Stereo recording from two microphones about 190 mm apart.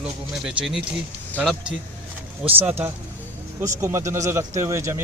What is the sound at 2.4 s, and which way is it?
A man's voice, 10° right (ahead or behind).